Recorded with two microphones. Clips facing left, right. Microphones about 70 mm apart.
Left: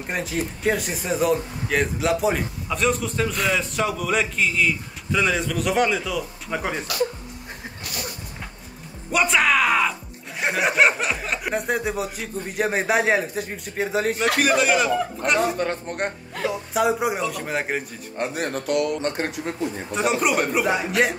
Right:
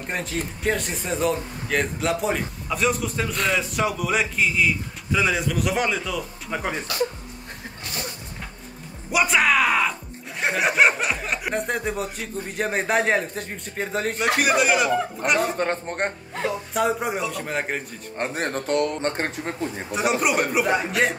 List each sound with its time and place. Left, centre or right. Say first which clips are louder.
0.1 s speech: left 2 dB; centre
7.8 s a sound: right 1 dB; right
9.1 s speech: even; centre
15.5 s speech: right 1 dB; right
16.4 s speech: left 2 dB; centre
18.1 s speech: even; right
19.9 s speech: even; centre